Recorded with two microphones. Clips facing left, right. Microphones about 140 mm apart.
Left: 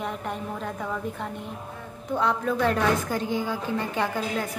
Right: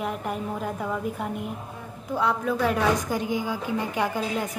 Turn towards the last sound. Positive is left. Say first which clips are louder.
# right 1 dB
turn(degrees=-15)  # may be behind; listen again after turning